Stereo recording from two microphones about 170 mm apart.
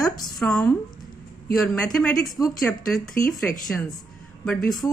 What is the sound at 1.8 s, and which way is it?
Speech, 5° left (ahead or behind).